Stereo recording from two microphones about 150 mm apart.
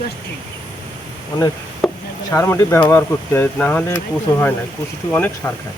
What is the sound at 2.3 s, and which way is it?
Speech, 15° left (ahead or behind).